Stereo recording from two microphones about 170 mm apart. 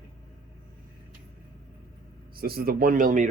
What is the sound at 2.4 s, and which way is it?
Speech, 60° right (ahead or behind).